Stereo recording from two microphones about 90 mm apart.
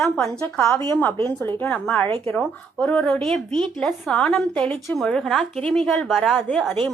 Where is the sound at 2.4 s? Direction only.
10° left (ahead or behind).